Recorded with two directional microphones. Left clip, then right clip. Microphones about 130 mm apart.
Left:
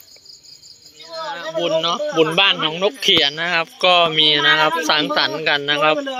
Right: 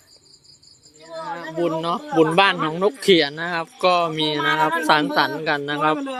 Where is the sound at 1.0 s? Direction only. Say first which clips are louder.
Left 3 dB; 50° right (ahead or behind).